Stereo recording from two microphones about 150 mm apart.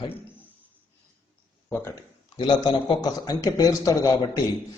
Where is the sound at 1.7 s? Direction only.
15° left (ahead or behind).